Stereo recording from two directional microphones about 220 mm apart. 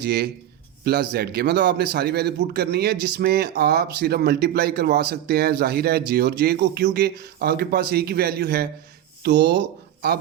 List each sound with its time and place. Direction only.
0.0 s a man's voice: 50° right (ahead or behind)